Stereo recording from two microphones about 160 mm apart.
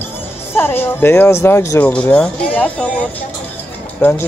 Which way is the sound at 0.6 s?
15° left (ahead or behind).